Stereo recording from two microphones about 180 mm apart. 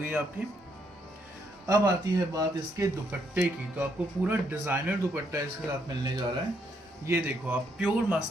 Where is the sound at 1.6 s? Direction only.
20° right (ahead or behind).